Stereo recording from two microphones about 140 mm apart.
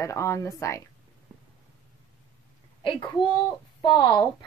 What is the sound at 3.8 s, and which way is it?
Speech, 35° left (ahead or behind).